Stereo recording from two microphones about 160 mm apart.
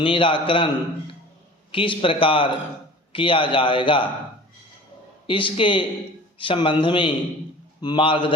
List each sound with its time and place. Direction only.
0.0 s a man's voice: 30° left (ahead or behind)
5.2 s a man's voice: 30° left (ahead or behind)